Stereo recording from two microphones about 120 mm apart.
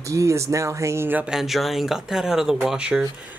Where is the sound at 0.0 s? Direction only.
25° right (ahead or behind).